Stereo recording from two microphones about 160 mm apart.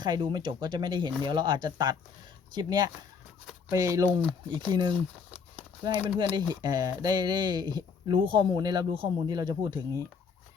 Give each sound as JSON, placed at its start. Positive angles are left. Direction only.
{"t": 0.0, "sound": "speech", "side_deg": -25}